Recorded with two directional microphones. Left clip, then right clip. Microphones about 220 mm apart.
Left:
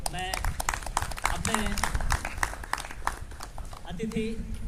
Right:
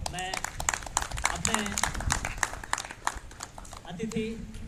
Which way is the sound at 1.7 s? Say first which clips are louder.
Even; 45° right (ahead or behind).